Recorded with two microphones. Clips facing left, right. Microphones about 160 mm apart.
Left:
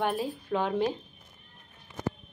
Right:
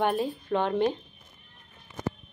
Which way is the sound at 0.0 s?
Centre (ahead or behind).